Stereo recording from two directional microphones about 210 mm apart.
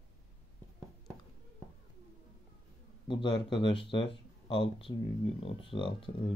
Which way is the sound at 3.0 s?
25° left (ahead or behind).